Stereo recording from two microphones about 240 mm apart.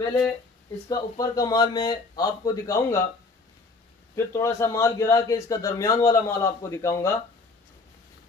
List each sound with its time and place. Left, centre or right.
0.8 s a man's voice: centre
4.1 s a man's voice: centre